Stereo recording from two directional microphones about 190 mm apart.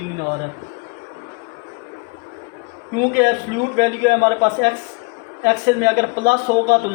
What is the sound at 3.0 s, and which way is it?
A man's voice, 55° right (ahead or behind).